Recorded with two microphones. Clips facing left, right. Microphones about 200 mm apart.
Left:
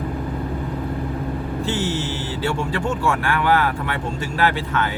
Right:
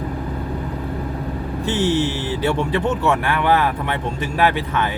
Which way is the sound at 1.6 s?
20° right (ahead or behind).